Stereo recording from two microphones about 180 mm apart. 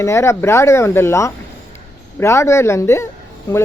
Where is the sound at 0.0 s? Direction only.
15° left (ahead or behind).